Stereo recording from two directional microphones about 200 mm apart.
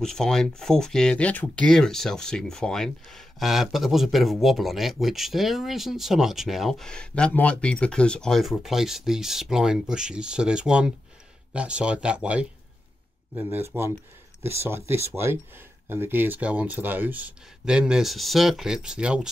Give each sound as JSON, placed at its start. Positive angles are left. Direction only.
{"t": 0.0, "sound": "speech", "side_deg": 5}